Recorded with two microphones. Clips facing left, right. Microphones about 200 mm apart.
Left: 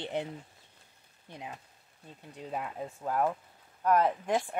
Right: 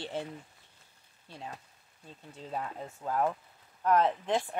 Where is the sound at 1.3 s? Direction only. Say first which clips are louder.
Even; 20° left (ahead or behind).